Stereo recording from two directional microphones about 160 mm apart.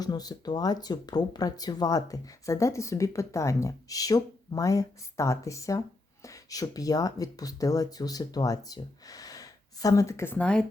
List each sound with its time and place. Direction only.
0.0 s speech: 25° left (ahead or behind); by 10.7 s 5° left (ahead or behind)